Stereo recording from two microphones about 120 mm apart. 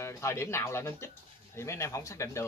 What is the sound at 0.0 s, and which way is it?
Speech, 20° left (ahead or behind).